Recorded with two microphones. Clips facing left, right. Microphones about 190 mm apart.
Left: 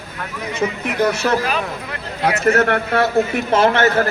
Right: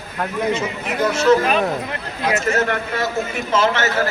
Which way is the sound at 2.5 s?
60° left (ahead or behind).